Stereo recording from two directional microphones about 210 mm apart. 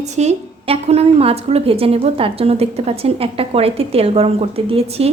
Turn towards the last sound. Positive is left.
turn(degrees=-30)  # may be behind; listen again after turning